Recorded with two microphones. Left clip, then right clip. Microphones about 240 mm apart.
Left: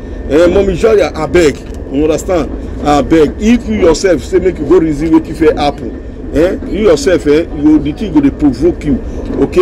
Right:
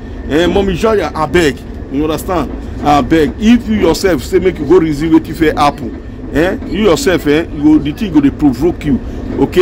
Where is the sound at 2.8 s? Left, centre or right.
Centre.